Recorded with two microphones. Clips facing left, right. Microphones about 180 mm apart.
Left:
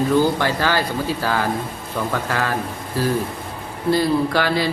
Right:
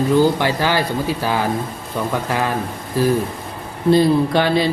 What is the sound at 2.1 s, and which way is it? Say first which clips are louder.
Speech: right 3 dB; 15° right (ahead or behind).